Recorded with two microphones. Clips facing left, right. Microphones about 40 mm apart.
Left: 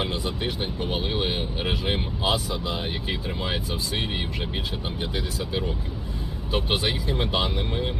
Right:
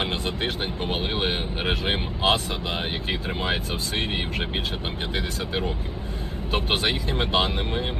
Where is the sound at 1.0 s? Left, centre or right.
Right.